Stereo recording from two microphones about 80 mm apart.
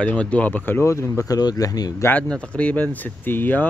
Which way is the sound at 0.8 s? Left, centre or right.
Left.